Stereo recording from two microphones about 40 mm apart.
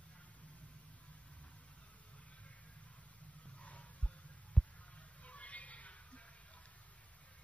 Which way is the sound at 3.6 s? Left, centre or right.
Left.